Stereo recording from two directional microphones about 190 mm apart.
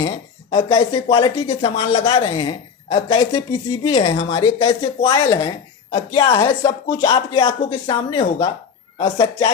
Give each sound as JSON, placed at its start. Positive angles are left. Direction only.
{"t": 0.5, "sound": "speech", "side_deg": 30}